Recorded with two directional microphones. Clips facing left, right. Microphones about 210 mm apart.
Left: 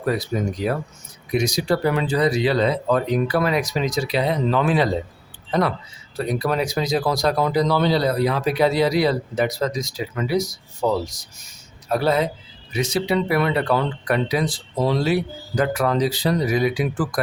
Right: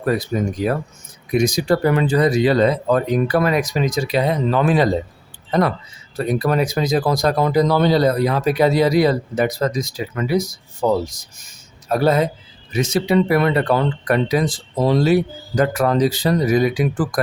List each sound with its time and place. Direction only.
0.0 s speech: 50° right (ahead or behind)